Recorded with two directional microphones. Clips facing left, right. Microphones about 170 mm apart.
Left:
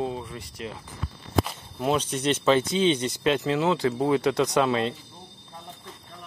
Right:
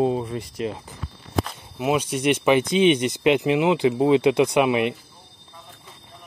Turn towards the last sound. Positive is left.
turn(degrees=-15)  # may be behind; listen again after turning